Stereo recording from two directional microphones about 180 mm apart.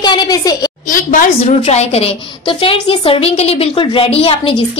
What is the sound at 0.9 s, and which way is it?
Speech, 45° left (ahead or behind).